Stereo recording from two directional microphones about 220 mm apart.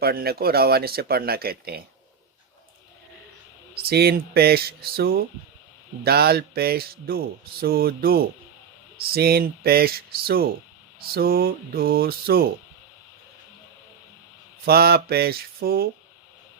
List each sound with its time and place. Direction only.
0.0 s speech: 45° right (ahead or behind)
3.8 s speech: 45° right (ahead or behind)
14.6 s speech: 45° right (ahead or behind)